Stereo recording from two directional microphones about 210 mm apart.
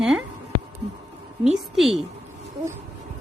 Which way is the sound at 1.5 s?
Centre (ahead or behind).